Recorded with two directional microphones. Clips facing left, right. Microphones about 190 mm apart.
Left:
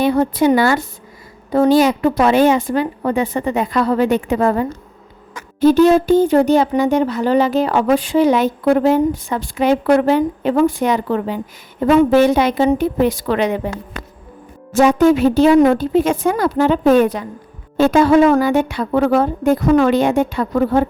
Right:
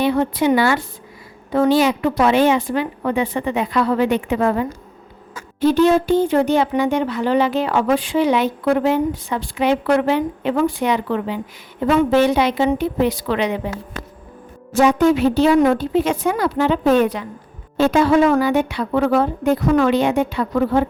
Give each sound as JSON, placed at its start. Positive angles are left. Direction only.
{"t": 0.0, "sound": "a woman's voice", "side_deg": 40}
{"t": 14.7, "sound": "speech", "side_deg": 45}